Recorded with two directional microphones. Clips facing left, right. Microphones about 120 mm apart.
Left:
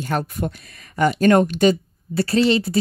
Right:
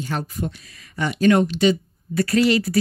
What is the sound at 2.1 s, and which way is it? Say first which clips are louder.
Speech: even; 30° left (ahead or behind).